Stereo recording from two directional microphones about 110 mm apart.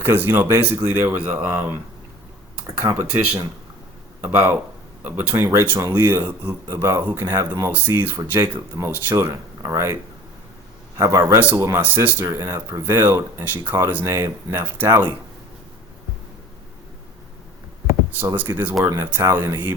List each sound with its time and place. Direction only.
0.0 s speech: 20° right (ahead or behind)
4.2 s speech: 15° right (ahead or behind)
7.3 s speech: 35° right (ahead or behind)
7.7 s a man's voice: 15° right (ahead or behind)
18.3 s speech: 20° right (ahead or behind)